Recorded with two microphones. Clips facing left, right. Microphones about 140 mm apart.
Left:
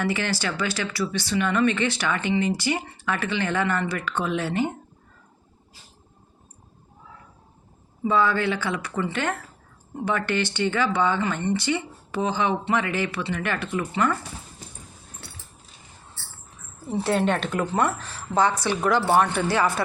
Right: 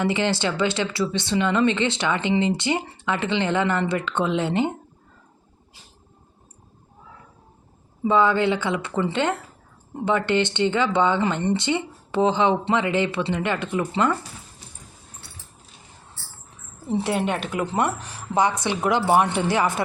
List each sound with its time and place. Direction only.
0.0 s speech: 20° right (ahead or behind)
8.0 s speech: 20° right (ahead or behind)
16.9 s a woman's voice: 15° right (ahead or behind)